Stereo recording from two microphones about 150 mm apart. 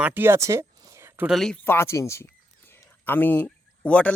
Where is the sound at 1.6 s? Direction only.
15° left (ahead or behind).